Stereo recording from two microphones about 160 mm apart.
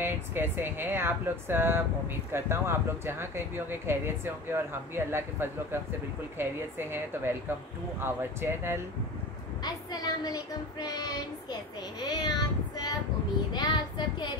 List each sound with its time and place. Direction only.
0.0 s speech: 15° right (ahead or behind)
9.6 s speech: 25° left (ahead or behind)